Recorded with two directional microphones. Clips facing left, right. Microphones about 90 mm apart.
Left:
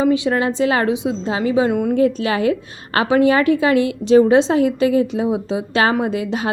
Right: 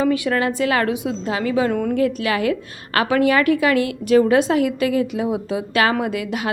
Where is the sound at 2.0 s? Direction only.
30° left (ahead or behind).